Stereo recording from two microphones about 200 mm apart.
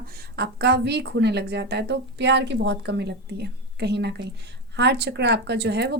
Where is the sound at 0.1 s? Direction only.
50° right (ahead or behind).